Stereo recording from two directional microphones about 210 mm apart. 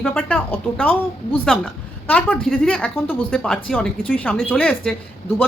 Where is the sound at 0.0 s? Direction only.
5° left (ahead or behind).